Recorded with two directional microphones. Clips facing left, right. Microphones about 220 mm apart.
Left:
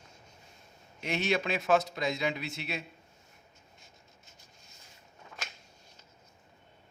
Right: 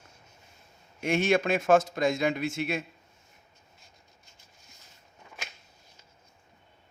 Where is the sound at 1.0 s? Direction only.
50° right (ahead or behind).